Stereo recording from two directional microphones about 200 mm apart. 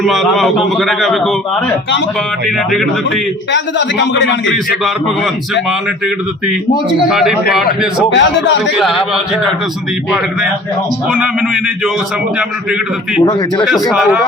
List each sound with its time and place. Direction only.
0.0 s a man's voice: centre (ahead or behind)
3.5 s a man's voice: 60° left (ahead or behind)
4.8 s a man's voice: centre (ahead or behind)
7.1 s a man's voice: centre (ahead or behind)
8.1 s a man's voice: 65° left (ahead or behind)
8.8 s a man's voice: centre (ahead or behind)
11.1 s a man's voice: centre (ahead or behind)
13.9 s a man's voice: 5° right (ahead or behind)